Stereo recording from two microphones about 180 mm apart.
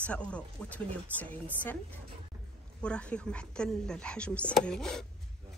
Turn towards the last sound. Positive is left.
turn(degrees=5)  # may be behind; listen again after turning